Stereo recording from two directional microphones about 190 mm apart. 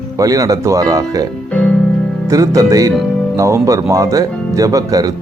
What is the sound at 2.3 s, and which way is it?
Speech, 15° right (ahead or behind).